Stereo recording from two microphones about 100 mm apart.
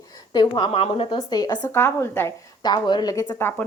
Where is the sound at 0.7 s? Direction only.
75° left (ahead or behind).